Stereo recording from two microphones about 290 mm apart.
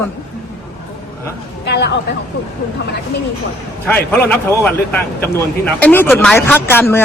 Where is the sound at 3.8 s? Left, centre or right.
Centre.